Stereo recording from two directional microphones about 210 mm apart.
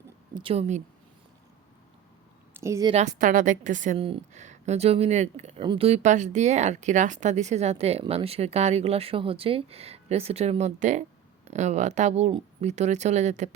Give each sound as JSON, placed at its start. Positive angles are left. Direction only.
{"t": 0.3, "sound": "speech", "side_deg": -25}
{"t": 2.5, "sound": "a woman's voice", "side_deg": -15}
{"t": 2.9, "sound": "a woman's voice", "side_deg": -35}